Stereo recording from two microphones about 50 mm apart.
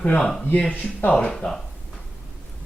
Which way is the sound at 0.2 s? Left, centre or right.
Centre.